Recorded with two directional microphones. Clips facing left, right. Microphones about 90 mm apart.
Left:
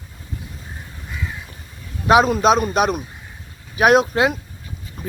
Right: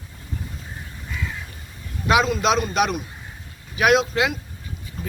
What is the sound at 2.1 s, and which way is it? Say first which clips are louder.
A man's voice: left 5 dB; 40° left (ahead or behind).